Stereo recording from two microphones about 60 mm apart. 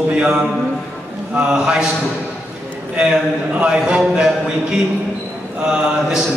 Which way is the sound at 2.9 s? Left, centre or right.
Centre.